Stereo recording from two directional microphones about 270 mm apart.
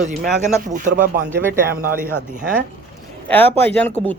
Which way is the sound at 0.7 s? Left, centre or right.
Right.